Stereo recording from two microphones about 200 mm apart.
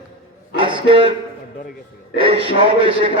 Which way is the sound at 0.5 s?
25° right (ahead or behind).